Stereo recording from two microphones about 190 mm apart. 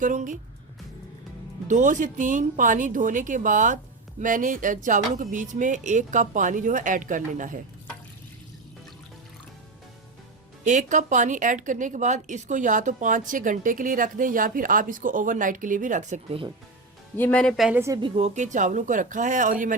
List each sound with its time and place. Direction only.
0.0 s a woman's voice: 40° right (ahead or behind)
1.6 s a woman's voice: 40° right (ahead or behind)
10.6 s a woman's voice: 40° right (ahead or behind)
17.2 s speech: 10° left (ahead or behind)
17.7 s speech: 15° right (ahead or behind)
18.0 s a woman's voice: 35° right (ahead or behind)